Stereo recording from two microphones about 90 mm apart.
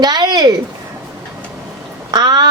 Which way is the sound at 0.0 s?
50° right (ahead or behind).